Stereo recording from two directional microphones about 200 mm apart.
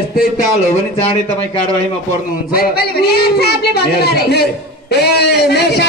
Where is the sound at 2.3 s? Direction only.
45° left (ahead or behind).